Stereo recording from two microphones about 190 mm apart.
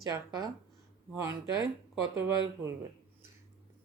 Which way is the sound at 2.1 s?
15° right (ahead or behind).